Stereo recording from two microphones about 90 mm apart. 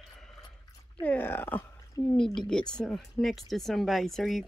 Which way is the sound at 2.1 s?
5° left (ahead or behind).